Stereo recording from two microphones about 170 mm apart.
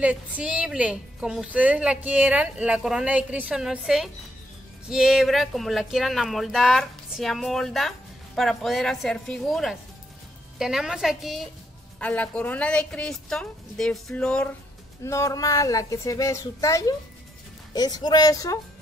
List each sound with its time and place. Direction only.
0.4 s a woman's voice: 5° right (ahead or behind)
15.0 s a woman's voice: 15° left (ahead or behind)